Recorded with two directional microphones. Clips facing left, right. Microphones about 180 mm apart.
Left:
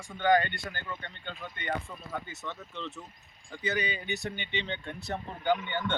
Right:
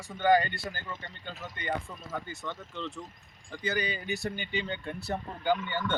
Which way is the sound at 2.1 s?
Centre (ahead or behind).